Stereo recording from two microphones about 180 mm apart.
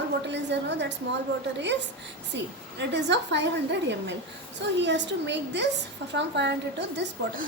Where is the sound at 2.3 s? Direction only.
75° right (ahead or behind).